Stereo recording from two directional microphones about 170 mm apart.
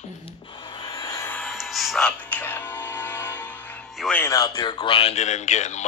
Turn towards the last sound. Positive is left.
turn(degrees=45)  # may be behind; listen again after turning